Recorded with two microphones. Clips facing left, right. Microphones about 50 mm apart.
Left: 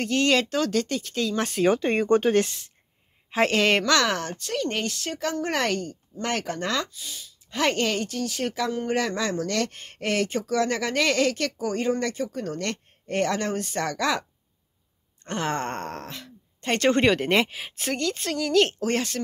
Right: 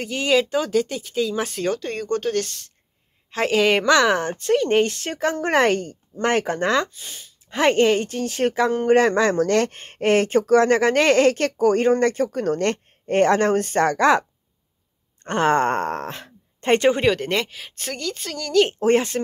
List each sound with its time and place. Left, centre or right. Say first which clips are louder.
0.0 s speech: right 2 dB; centre
1.7 s speech: left 7 dB; left
3.3 s a woman's voice: right 2 dB; centre
3.8 s speech: right 6 dB; centre; by 14.2 s right
15.2 s speech: right 9 dB; right
16.9 s speech: even; centre
18.8 s speech: right 8 dB; right